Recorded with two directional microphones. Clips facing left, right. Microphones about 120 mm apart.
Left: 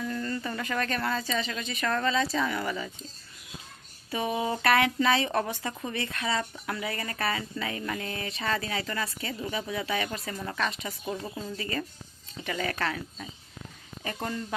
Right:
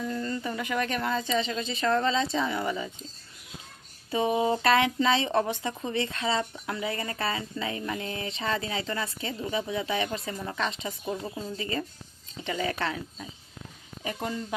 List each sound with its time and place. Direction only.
0.0 s speech: 20° right (ahead or behind)
4.1 s speech: 25° right (ahead or behind)
14.0 s speech: 15° right (ahead or behind)